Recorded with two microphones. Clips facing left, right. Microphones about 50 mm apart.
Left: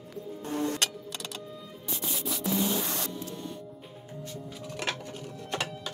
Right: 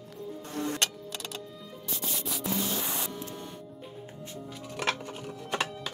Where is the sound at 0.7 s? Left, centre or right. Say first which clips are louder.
Even; centre.